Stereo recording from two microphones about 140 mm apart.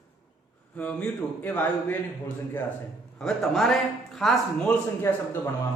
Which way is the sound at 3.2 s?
Centre (ahead or behind).